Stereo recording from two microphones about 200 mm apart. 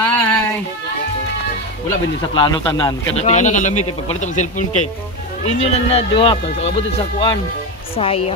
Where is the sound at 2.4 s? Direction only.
20° left (ahead or behind).